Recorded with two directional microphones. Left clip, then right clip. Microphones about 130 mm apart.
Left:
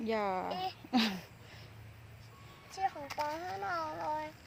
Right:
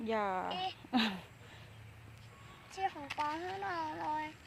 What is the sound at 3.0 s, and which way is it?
Speech, 10° right (ahead or behind).